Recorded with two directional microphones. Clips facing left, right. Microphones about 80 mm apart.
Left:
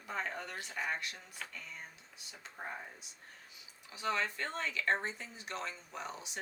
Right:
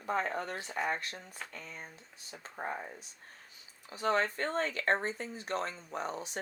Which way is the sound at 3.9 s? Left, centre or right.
Right.